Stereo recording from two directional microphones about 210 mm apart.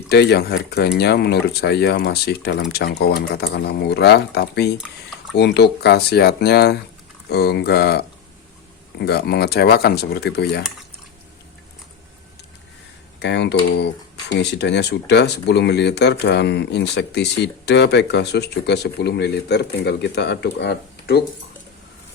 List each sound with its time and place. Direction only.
0.1 s speech: 50° left (ahead or behind)
13.1 s speech: 55° left (ahead or behind)